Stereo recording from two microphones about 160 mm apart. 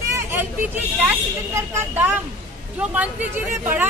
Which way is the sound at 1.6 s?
15° right (ahead or behind).